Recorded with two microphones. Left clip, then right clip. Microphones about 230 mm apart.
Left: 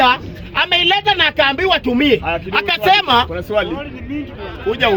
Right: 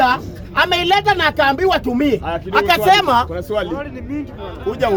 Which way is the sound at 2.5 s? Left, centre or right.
Centre.